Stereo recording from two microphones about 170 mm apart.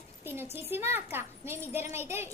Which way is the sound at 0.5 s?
15° right (ahead or behind).